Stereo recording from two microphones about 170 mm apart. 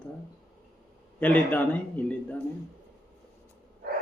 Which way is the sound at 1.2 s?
10° left (ahead or behind).